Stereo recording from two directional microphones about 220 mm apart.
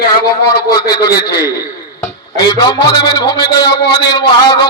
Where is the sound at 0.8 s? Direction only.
15° left (ahead or behind).